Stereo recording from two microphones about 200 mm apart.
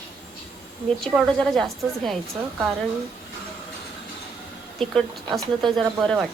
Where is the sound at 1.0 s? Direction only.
Centre (ahead or behind).